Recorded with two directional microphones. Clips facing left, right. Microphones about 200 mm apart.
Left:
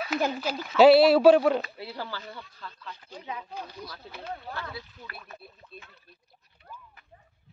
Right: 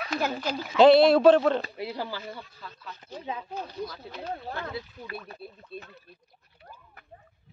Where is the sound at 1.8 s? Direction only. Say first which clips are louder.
Right 4 dB; 15° right (ahead or behind).